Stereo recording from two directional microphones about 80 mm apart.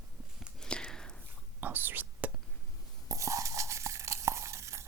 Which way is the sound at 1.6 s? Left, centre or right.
Right.